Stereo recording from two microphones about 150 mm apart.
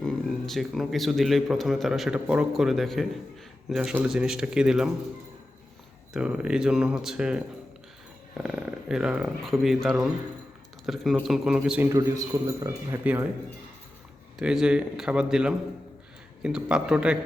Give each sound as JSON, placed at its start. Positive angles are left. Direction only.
{"t": 0.0, "sound": "a man's voice", "side_deg": 0}
{"t": 6.1, "sound": "a man's voice", "side_deg": -5}
{"t": 8.4, "sound": "a man's voice", "side_deg": -5}
{"t": 11.9, "sound": "a man's voice", "side_deg": -25}
{"t": 14.3, "sound": "a man's voice", "side_deg": -5}